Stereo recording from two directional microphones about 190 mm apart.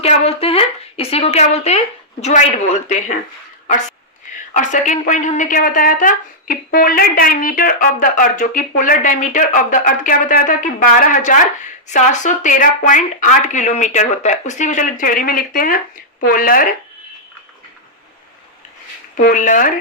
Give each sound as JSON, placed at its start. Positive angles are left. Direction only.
{"t": 0.0, "sound": "a woman's voice", "side_deg": 30}
{"t": 19.1, "sound": "speech", "side_deg": 45}